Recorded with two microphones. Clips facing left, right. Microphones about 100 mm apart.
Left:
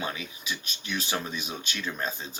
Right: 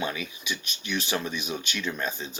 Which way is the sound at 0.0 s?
30° left (ahead or behind).